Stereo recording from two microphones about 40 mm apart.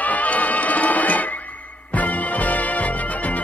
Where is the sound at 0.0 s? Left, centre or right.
Left.